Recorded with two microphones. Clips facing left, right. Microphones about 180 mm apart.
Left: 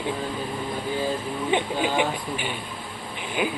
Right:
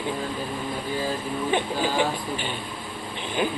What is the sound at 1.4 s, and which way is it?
Speech, 20° left (ahead or behind).